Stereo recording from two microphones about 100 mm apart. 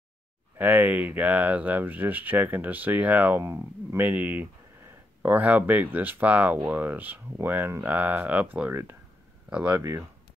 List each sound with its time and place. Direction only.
0.6 s speech: 15° right (ahead or behind)
9.8 s speech: 30° right (ahead or behind)